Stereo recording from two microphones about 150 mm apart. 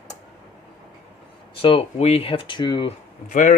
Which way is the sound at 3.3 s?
60° left (ahead or behind).